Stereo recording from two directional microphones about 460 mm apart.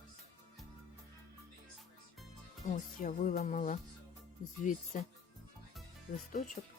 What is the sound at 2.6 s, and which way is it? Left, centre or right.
Speech, centre.